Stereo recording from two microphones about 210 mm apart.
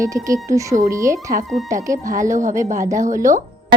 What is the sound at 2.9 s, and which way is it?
Speech, 35° right (ahead or behind).